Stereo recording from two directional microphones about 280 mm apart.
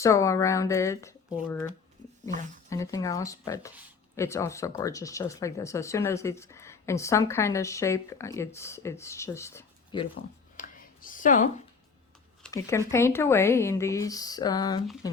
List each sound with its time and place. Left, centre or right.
0.0 s speech: centre
2.6 s speech: centre
10.6 s a sound: left
12.4 s speech: centre